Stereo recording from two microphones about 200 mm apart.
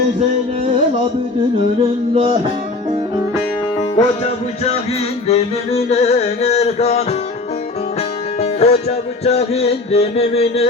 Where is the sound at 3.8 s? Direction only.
30° left (ahead or behind).